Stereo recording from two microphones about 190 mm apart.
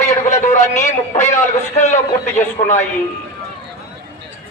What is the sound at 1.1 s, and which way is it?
Speech, 35° left (ahead or behind).